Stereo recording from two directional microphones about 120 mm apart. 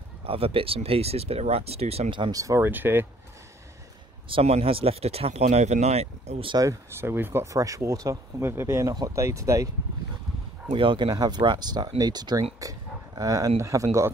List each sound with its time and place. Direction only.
0.2 s speech: 50° right (ahead or behind)
2.3 s speech: 25° right (ahead or behind)
4.3 s speech: 55° right (ahead or behind)
6.5 s speech: 25° right (ahead or behind)
10.7 s speech: 45° right (ahead or behind)
12.5 s a sound: 30° right (ahead or behind)
13.6 s speech: 25° right (ahead or behind)